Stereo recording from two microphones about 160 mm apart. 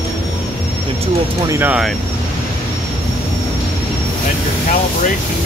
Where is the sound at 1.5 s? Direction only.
10° right (ahead or behind).